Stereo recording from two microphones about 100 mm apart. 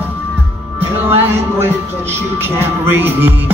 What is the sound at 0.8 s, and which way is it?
Speech, 25° right (ahead or behind).